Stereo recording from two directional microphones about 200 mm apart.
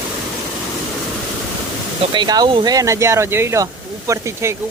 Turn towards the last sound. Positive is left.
turn(degrees=-15)  # may be behind; listen again after turning